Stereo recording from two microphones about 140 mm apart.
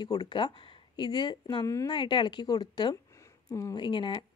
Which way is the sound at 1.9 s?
35° left (ahead or behind).